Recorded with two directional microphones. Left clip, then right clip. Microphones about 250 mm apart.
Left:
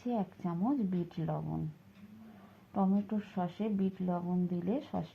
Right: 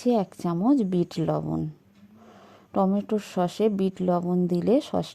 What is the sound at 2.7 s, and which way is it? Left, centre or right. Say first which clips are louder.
A woman's voice: right 10 dB; right.